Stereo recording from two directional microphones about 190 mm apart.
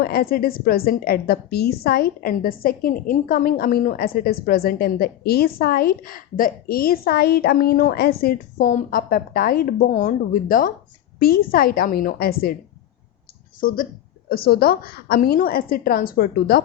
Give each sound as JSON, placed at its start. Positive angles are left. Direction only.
{"t": 0.0, "sound": "a woman's voice", "side_deg": 55}
{"t": 13.6, "sound": "a woman's voice", "side_deg": 50}